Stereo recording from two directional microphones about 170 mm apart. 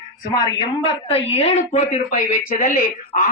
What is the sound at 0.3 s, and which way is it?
A woman's voice, 30° left (ahead or behind).